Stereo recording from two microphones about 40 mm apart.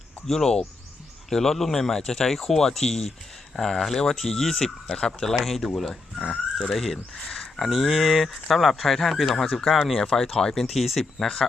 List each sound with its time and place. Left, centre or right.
0.3 s speech: centre
4.5 s speech: centre
5.5 s speech: centre
7.3 s a sound: centre
7.7 s speech: centre
10.7 s speech: centre